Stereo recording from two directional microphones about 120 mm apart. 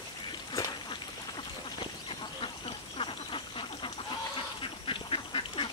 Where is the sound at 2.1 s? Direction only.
45° left (ahead or behind).